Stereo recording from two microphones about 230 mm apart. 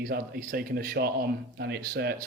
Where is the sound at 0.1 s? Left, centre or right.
Right.